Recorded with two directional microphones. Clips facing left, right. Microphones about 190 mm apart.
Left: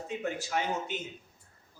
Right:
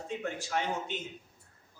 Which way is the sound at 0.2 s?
5° left (ahead or behind).